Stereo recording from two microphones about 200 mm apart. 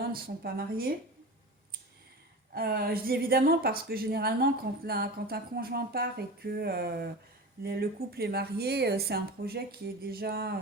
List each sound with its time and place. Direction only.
0.1 s speech: 50° right (ahead or behind)
2.5 s speech: 50° right (ahead or behind)